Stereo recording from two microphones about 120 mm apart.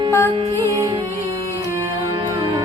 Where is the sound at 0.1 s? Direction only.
20° left (ahead or behind).